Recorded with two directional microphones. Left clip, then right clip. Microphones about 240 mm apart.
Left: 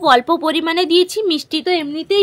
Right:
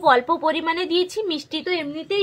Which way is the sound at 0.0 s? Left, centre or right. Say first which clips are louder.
Left 4 dB; left.